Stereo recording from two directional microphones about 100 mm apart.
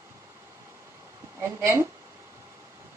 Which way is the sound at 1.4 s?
25° right (ahead or behind).